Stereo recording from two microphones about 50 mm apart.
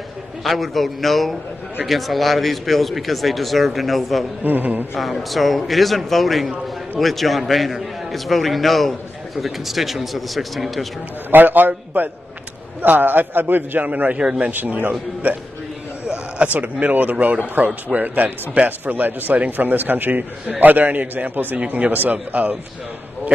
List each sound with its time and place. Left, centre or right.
0.4 s speech: centre
4.4 s speech: right
4.9 s speech: centre
11.2 s speech: right
13.8 s speech: right
14.1 s a man's voice: centre
14.5 s speech: right
16.4 s speech: right
21.5 s a man's voice: right
21.9 s speech: right